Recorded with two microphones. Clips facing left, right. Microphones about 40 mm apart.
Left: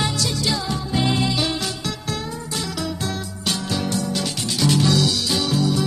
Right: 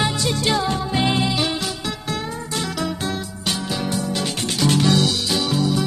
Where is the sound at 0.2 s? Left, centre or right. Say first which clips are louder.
Right 3 dB; right.